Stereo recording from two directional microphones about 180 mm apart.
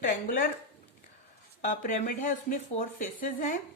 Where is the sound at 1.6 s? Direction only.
45° left (ahead or behind).